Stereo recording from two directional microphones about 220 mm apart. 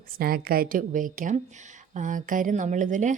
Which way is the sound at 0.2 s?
40° right (ahead or behind).